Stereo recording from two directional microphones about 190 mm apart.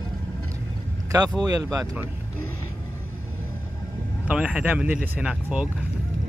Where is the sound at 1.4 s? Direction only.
20° right (ahead or behind).